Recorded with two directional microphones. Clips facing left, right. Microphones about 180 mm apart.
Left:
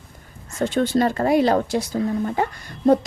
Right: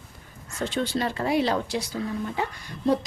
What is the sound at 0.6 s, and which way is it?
Speech, 50° left (ahead or behind).